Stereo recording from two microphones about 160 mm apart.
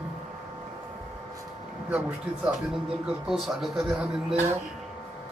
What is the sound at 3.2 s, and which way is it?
Speech, centre (ahead or behind).